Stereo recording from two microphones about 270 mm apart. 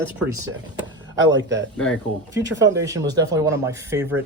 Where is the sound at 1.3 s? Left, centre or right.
Right.